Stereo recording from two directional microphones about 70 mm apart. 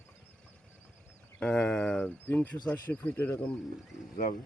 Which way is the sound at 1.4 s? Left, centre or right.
Centre.